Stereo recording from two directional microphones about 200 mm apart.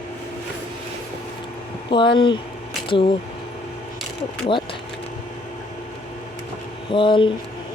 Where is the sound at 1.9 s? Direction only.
25° left (ahead or behind).